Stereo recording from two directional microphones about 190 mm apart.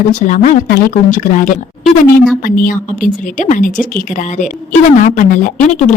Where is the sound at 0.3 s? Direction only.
40° left (ahead or behind).